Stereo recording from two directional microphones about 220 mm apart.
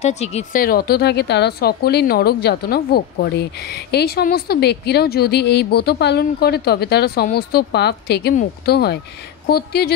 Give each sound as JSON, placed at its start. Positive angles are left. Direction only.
{"t": 0.0, "sound": "speech", "side_deg": 30}